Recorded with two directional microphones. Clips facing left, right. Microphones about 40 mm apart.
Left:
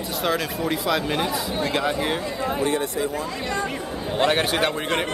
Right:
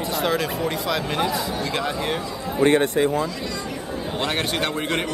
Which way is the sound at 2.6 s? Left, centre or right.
Right.